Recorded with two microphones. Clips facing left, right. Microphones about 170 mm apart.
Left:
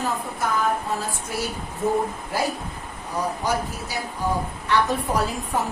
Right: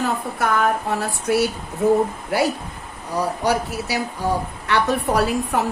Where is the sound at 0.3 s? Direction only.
70° right (ahead or behind).